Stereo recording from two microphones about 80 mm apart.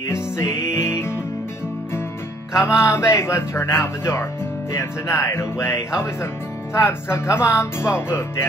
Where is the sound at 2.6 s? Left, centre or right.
Left.